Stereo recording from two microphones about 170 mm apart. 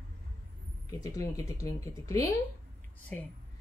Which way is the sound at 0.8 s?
20° left (ahead or behind).